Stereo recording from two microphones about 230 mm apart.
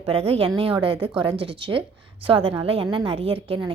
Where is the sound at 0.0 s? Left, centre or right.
Right.